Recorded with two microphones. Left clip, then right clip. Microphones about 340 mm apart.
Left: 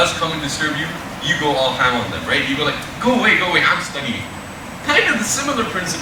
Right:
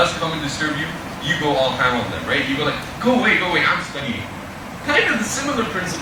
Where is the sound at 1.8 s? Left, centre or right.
Centre.